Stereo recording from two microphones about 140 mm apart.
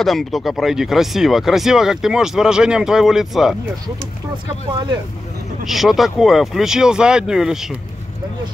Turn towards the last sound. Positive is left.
turn(degrees=-5)  # may be behind; listen again after turning